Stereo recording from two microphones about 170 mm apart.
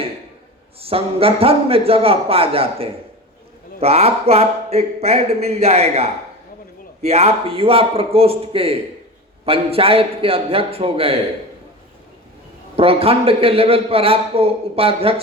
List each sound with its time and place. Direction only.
0.8 s a man's voice: 35° right (ahead or behind)
12.7 s a man's voice: 35° right (ahead or behind)